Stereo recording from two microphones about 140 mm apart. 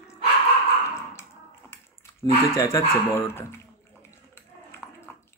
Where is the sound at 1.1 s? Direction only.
20° left (ahead or behind).